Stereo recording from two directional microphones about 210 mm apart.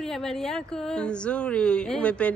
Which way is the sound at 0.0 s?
Centre (ahead or behind).